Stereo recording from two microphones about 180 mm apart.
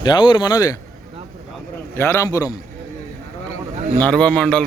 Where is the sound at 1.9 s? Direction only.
15° left (ahead or behind).